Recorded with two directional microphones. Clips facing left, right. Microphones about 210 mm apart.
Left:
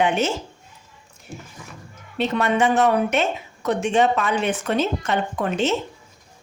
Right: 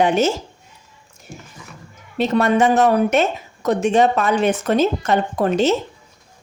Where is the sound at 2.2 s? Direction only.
40° right (ahead or behind).